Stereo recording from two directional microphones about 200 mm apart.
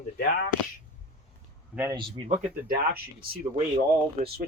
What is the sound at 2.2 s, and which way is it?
Speech, 40° right (ahead or behind).